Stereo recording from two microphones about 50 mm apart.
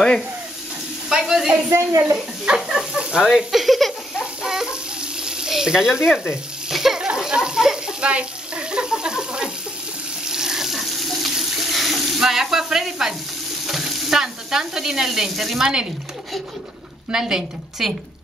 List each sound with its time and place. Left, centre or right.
1.0 s speech: centre
1.7 s speech: right
2.7 s a woman's voice: centre
3.3 s speech: centre
4.2 s frying: centre
6.7 s sizzle: centre
7.1 s frying: centre
10.2 s water tap: centre
13.7 s sizzle: centre
17.1 s a woman's voice: centre